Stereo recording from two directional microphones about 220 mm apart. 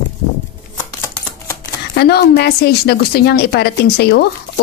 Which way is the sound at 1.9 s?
50° left (ahead or behind).